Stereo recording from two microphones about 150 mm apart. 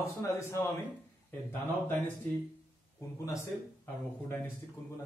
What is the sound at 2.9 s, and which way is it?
Speech, 20° left (ahead or behind).